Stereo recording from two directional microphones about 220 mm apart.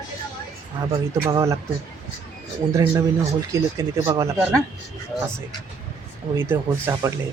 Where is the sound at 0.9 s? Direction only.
15° right (ahead or behind).